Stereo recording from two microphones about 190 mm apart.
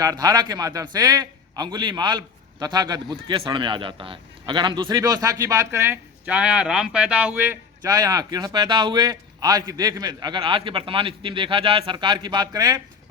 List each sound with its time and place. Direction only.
0.0 s a man's voice: 20° right (ahead or behind)